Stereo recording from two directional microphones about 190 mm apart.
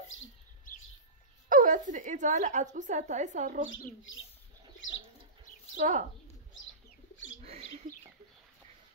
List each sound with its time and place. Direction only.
1.5 s a woman's voice: 45° right (ahead or behind)
5.8 s a woman's voice: 40° right (ahead or behind)
7.4 s bird: 35° right (ahead or behind)